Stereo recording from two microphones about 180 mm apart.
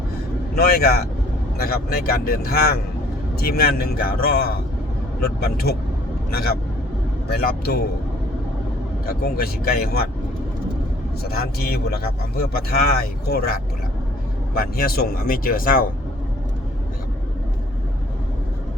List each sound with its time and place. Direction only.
0.5 s a man's voice: 55° left (ahead or behind)
7.3 s a man's voice: 60° left (ahead or behind)
9.0 s a man's voice: 55° left (ahead or behind)
11.2 s a man's voice: 60° left (ahead or behind)